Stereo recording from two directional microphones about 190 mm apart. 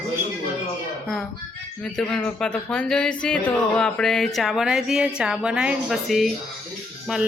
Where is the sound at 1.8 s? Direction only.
5° left (ahead or behind).